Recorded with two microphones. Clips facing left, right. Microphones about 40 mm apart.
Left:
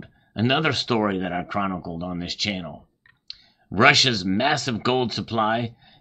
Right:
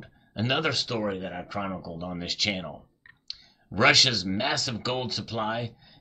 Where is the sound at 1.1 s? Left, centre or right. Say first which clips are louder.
Left 6 dB; left.